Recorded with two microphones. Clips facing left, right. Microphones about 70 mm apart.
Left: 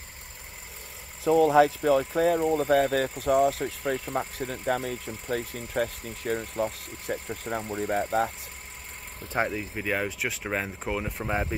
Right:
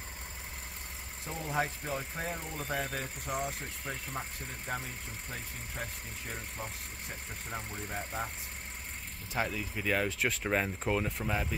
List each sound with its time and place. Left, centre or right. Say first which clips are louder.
1.2 s speech: left 15 dB; left
9.3 s speech: left 6 dB; left
9.8 s speech: left 1 dB; centre
11.1 s speech: left 5 dB; left